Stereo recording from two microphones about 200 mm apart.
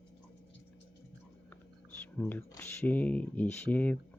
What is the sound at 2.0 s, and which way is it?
Speech, 10° left (ahead or behind).